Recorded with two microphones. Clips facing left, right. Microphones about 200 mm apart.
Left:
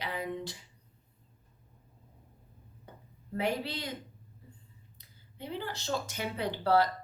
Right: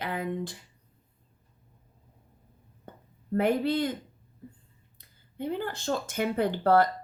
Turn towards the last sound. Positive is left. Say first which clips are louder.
# right 4 dB
turn(degrees=-50)  # may be behind; listen again after turning